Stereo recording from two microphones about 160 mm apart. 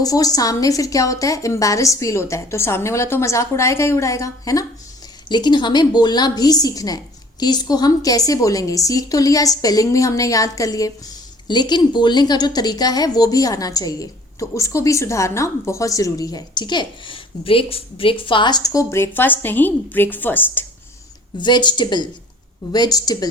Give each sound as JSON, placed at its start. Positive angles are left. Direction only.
{"t": 0.0, "sound": "a woman's voice", "side_deg": 20}
{"t": 21.3, "sound": "a woman's voice", "side_deg": 30}